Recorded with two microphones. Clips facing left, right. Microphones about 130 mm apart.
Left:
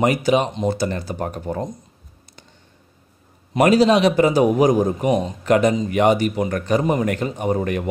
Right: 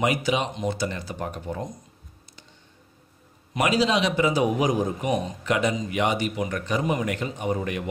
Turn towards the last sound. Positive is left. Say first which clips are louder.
# left 6 dB
turn(degrees=45)  # may be behind; listen again after turning